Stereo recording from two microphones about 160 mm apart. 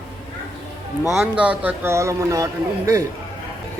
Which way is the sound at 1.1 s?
5° right (ahead or behind).